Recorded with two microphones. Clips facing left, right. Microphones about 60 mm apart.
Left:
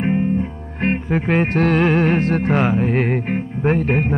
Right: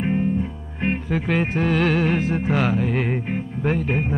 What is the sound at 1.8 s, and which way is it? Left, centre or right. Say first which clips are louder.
Music: left 4 dB; left.